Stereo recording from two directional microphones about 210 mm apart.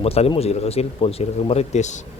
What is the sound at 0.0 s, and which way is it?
Speech, 30° left (ahead or behind).